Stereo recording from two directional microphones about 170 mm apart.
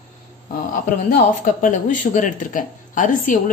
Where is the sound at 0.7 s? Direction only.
55° left (ahead or behind).